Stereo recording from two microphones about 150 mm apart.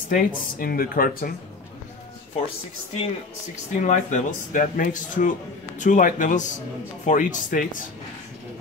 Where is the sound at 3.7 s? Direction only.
55° left (ahead or behind).